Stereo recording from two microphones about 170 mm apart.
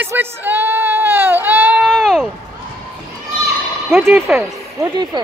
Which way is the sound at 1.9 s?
5° left (ahead or behind).